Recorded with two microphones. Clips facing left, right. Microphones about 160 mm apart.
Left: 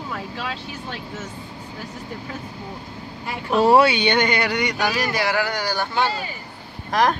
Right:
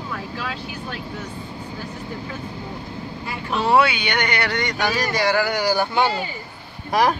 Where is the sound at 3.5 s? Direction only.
40° left (ahead or behind).